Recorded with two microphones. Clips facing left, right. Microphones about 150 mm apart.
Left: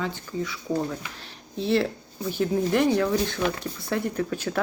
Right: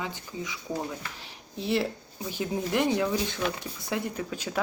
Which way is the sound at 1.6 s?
15° right (ahead or behind).